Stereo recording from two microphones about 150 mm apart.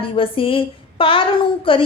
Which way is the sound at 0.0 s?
35° left (ahead or behind).